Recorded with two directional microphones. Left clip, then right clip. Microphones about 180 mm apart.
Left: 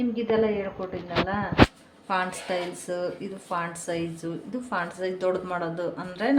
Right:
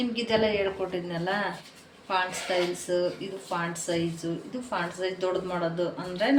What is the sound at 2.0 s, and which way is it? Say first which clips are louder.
A woman's voice: even; 70° left (ahead or behind).